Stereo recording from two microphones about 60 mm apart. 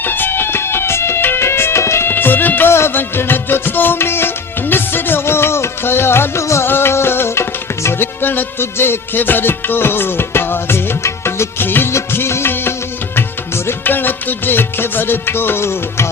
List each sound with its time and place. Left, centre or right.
0.0 s music: left
2.0 s music: left